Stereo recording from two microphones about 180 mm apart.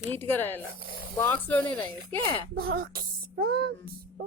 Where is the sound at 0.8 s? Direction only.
55° right (ahead or behind).